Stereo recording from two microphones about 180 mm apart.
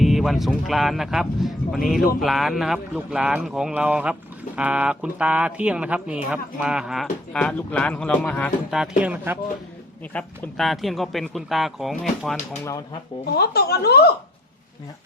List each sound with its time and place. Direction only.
0.0 s a man's voice: centre (ahead or behind)
10.1 s a man's voice: 5° left (ahead or behind)
12.6 s speech: 20° left (ahead or behind)
13.3 s speech: 60° left (ahead or behind)